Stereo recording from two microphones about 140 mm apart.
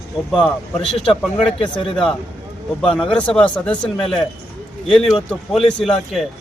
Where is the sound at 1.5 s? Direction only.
35° left (ahead or behind).